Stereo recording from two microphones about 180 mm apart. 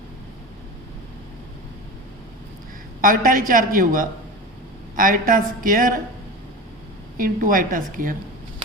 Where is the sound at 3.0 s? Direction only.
50° right (ahead or behind).